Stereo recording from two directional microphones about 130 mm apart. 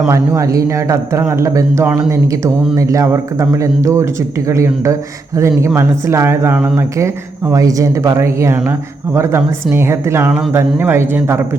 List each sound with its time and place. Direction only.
0.1 s speech: 25° right (ahead or behind)